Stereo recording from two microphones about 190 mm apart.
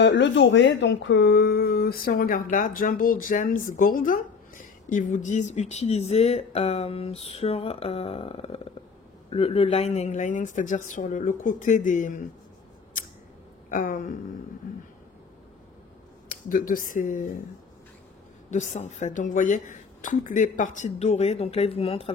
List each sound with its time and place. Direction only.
0.0 s speech: 70° left (ahead or behind); by 12.2 s 45° left (ahead or behind)
13.7 s speech: 45° left (ahead or behind)
16.3 s speech: 45° left (ahead or behind)
18.5 s speech: 40° left (ahead or behind)